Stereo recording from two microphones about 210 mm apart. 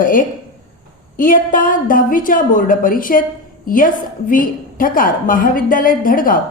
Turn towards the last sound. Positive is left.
turn(degrees=40)  # may be behind; listen again after turning